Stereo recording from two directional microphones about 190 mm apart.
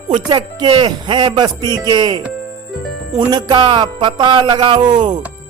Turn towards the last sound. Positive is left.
turn(degrees=-20)  # may be behind; listen again after turning